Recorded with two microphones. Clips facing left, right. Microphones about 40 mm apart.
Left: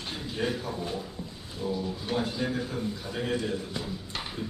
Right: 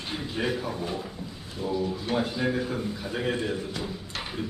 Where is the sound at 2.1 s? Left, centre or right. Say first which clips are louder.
Right 2 dB; centre.